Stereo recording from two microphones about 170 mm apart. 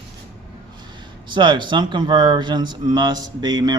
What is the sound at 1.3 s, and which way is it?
Speech, 30° right (ahead or behind).